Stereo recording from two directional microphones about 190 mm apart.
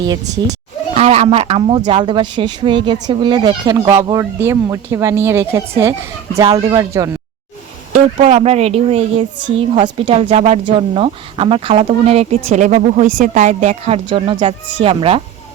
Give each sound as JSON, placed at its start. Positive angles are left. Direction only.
{"t": 0.9, "sound": "speech", "side_deg": -35}
{"t": 7.9, "sound": "a woman's voice", "side_deg": -40}